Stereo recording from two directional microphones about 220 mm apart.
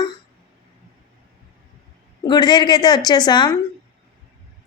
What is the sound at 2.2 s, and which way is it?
A woman's voice, 20° left (ahead or behind).